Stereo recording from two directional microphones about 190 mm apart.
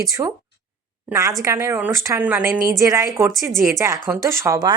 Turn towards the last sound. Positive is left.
turn(degrees=-20)  # may be behind; listen again after turning